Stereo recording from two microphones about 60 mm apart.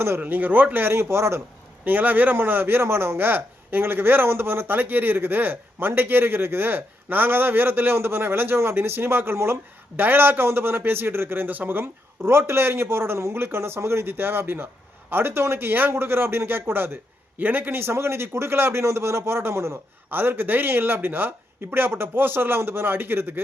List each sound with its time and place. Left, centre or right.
0.0 s a man's voice: right
1.8 s a man's voice: right
20.1 s a man's voice: right